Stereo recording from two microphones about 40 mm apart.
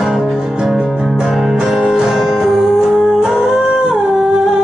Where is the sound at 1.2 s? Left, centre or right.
Centre.